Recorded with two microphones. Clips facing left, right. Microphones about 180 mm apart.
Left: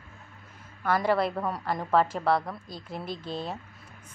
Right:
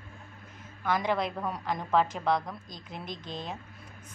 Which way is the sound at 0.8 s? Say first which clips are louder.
Left 4 dB; 5° left (ahead or behind).